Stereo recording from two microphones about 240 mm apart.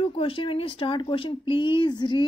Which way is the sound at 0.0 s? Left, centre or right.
Left.